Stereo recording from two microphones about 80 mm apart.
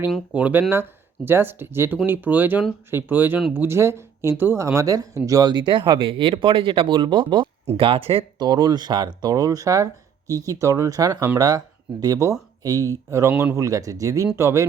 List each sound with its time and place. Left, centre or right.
0.3 s speech: centre
0.7 s speech: right
5.5 s speech: right
8.4 s speech: right
13.3 s speech: right
13.6 s speech: right